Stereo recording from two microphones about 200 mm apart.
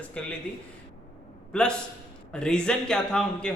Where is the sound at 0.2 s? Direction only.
5° left (ahead or behind).